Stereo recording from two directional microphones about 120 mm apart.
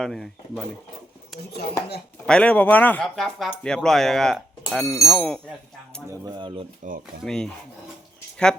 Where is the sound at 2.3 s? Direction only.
10° left (ahead or behind).